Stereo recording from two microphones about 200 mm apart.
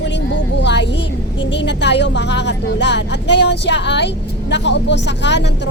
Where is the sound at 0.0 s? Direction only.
60° left (ahead or behind).